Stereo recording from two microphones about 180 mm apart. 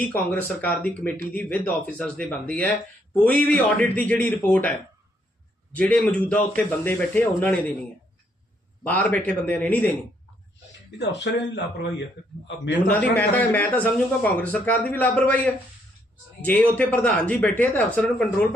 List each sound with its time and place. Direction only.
0.0 s speech: 10° left (ahead or behind)
5.7 s speech: 5° left (ahead or behind)
8.8 s speech: 10° left (ahead or behind)
10.9 s speech: 70° left (ahead or behind)
12.9 s speech: 10° left (ahead or behind)